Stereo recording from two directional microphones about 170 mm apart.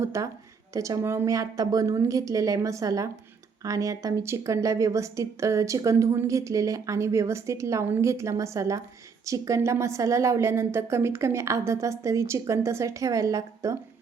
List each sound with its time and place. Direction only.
0.0 s a woman's voice: 15° right (ahead or behind)